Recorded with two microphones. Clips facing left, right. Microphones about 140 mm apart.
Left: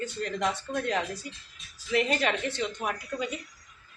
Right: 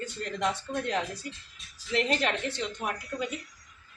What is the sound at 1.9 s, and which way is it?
Speech, 10° left (ahead or behind).